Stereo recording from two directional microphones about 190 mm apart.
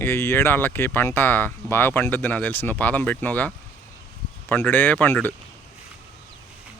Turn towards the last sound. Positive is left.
turn(degrees=10)  # may be behind; listen again after turning